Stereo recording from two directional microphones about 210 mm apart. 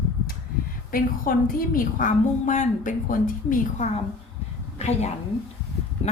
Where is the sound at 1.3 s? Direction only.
40° left (ahead or behind).